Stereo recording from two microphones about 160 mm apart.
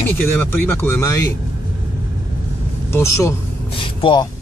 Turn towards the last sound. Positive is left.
turn(degrees=30)  # may be behind; listen again after turning